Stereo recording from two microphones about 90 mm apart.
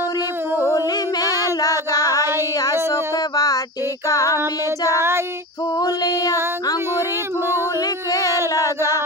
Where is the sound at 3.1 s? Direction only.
45° left (ahead or behind).